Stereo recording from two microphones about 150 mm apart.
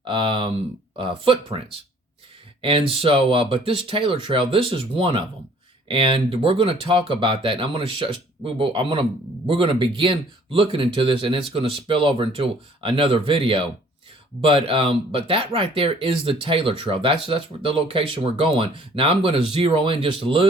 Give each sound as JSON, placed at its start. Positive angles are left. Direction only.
{"t": 0.0, "sound": "speech", "side_deg": -35}